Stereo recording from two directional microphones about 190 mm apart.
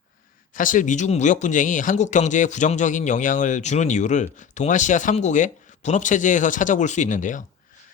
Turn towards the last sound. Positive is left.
turn(degrees=45)  # may be behind; listen again after turning